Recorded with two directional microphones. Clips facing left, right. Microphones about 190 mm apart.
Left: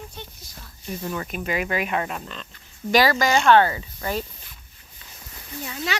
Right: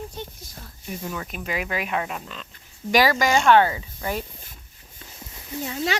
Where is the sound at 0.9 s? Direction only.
5° right (ahead or behind).